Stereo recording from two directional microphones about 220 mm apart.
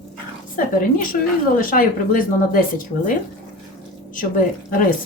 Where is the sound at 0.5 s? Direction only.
40° left (ahead or behind).